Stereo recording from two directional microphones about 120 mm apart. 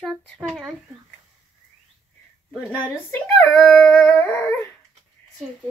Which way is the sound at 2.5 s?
20° left (ahead or behind).